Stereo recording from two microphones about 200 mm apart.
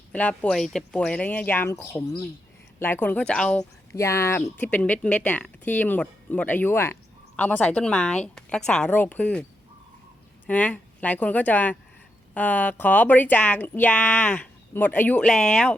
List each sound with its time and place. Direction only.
0.1 s speech: 5° left (ahead or behind)
3.6 s speech: 15° left (ahead or behind)